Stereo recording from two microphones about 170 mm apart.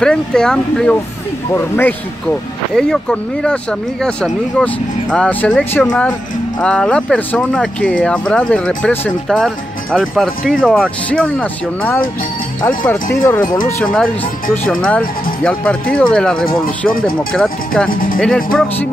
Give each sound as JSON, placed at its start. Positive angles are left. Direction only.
{"t": 0.0, "sound": "speech", "side_deg": 5}
{"t": 13.4, "sound": "speech", "side_deg": 50}
{"t": 14.5, "sound": "speech", "side_deg": 10}
{"t": 17.8, "sound": "speech", "side_deg": 55}
{"t": 18.2, "sound": "speech", "side_deg": 5}